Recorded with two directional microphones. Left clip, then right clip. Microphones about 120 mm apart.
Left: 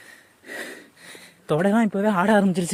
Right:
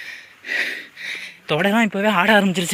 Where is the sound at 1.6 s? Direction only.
40° left (ahead or behind).